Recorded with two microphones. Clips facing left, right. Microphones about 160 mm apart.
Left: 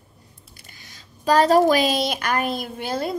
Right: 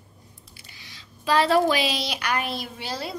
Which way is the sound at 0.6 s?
45° left (ahead or behind).